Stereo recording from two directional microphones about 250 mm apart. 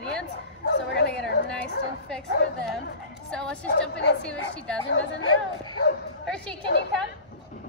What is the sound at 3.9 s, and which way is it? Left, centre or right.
Speech, left.